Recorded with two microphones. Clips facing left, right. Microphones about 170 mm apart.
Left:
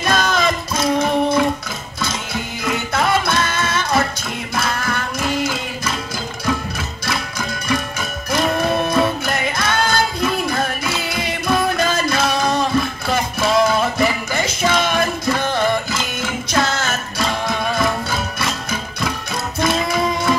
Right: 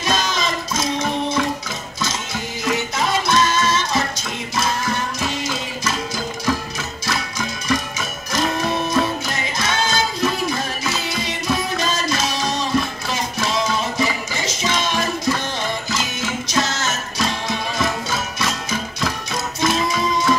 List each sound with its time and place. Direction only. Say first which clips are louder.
0.0 s music: left 4 dB; 55° left (ahead or behind)
2.6 s music: left 2 dB; 55° left (ahead or behind)
7.1 s music: left 1 dB; 60° left (ahead or behind)